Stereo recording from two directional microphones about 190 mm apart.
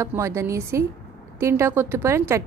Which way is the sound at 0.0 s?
15° right (ahead or behind).